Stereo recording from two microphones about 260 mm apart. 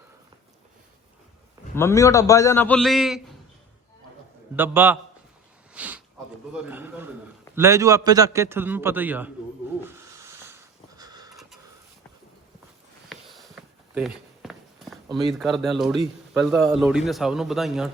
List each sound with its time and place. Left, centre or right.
1.7 s a man's voice: centre
4.5 s a man's voice: centre
5.7 s a sound: centre
6.5 s a man's voice: centre
9.9 s a sound: centre
13.1 s walk: centre
16.3 s a man's voice: centre